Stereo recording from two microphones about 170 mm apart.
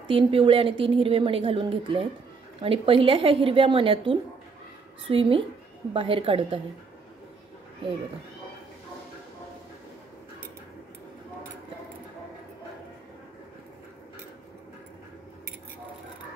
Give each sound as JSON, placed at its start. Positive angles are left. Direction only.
{"t": 0.1, "sound": "a woman's voice", "side_deg": -30}